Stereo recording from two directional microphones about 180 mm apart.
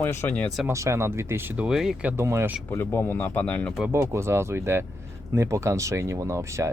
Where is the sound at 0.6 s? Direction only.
15° right (ahead or behind).